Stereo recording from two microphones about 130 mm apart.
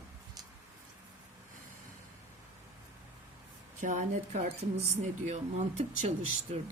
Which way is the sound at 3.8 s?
75° right (ahead or behind).